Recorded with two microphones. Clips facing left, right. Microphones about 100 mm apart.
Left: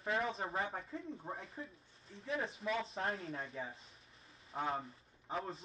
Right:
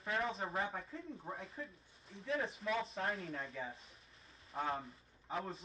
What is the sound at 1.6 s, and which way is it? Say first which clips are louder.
Speech: even; 30° left (ahead or behind).